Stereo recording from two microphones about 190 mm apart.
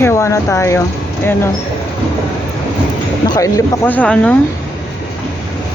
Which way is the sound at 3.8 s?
5° left (ahead or behind).